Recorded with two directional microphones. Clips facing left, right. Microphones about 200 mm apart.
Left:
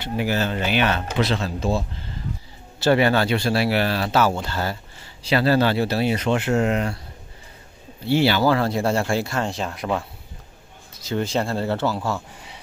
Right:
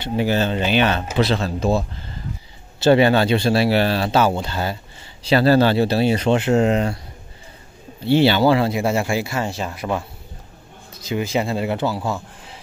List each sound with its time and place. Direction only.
0.0 s speech: 25° right (ahead or behind)
1.4 s speech: 50° right (ahead or behind)
2.8 s speech: 25° right (ahead or behind)
5.3 s speech: 35° right (ahead or behind)
8.1 s speech: 25° right (ahead or behind); by 10.0 s centre (ahead or behind)
11.1 s speech: 10° right (ahead or behind)